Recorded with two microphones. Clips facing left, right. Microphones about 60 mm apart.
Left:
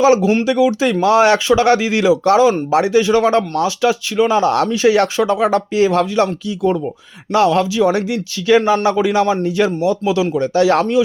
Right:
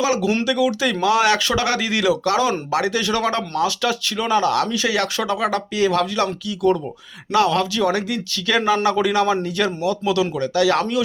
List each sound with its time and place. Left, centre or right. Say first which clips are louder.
0.0 s speech: left 7 dB; left; by 4.4 s centre
4.4 s speech: left 6 dB; left